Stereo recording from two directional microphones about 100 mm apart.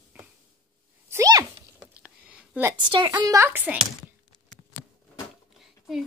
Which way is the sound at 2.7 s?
50° right (ahead or behind).